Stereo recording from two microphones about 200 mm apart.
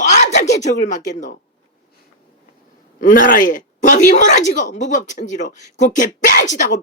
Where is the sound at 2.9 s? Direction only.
40° left (ahead or behind).